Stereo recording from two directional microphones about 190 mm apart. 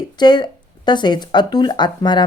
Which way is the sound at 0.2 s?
20° left (ahead or behind).